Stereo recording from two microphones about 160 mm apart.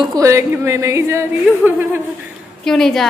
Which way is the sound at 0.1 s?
20° right (ahead or behind).